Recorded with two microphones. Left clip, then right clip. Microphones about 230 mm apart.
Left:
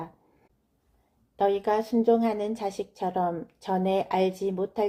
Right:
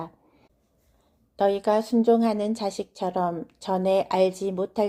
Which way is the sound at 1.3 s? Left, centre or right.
Right.